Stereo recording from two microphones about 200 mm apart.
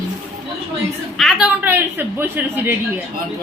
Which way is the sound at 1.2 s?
Centre (ahead or behind).